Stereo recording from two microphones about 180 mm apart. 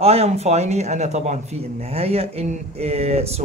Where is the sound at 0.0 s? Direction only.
35° right (ahead or behind).